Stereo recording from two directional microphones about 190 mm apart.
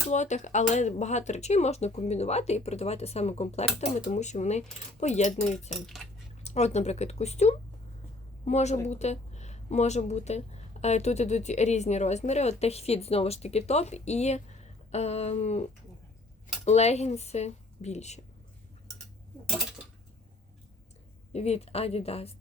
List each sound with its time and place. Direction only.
0.1 s speech: 40° left (ahead or behind)
5.7 s cutlery: centre (ahead or behind)
6.4 s speech: 35° left (ahead or behind)
21.3 s speech: 35° left (ahead or behind)